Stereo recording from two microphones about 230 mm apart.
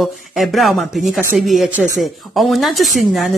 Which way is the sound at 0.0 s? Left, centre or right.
Centre.